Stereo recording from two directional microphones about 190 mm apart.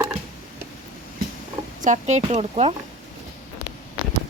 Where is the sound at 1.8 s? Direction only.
40° right (ahead or behind).